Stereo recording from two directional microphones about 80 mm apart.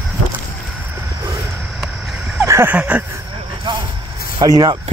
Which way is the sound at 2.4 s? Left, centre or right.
Right.